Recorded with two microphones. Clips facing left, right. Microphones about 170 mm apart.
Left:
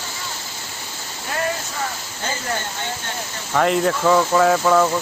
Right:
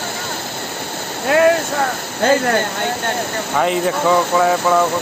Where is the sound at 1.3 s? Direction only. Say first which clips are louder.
Right 12 dB; 70° right (ahead or behind).